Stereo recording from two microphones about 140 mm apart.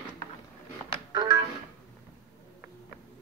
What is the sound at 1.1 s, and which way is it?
Music, 30° right (ahead or behind).